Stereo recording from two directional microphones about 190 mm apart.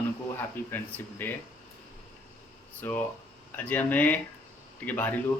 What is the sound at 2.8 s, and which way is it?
A man's voice, 10° left (ahead or behind).